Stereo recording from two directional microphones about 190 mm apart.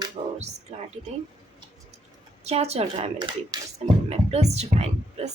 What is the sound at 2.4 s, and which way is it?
Speech, 35° right (ahead or behind).